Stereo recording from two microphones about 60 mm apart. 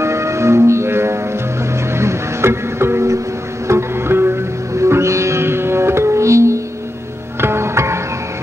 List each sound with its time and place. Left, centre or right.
0.0 s music: right
4.7 s music: right
7.3 s music: right